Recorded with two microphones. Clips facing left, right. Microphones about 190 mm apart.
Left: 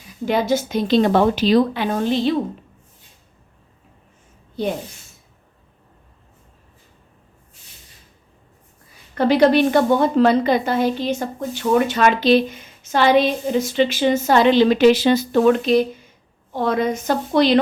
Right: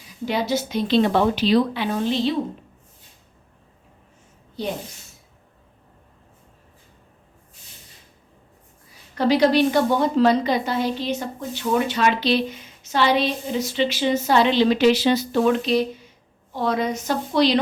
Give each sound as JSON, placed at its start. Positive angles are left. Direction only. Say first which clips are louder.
{"t": 0.3, "sound": "a woman's voice", "louder": "left 4 dB", "side_deg": 50}
{"t": 9.1, "sound": "a woman's voice", "louder": "left 3 dB", "side_deg": 55}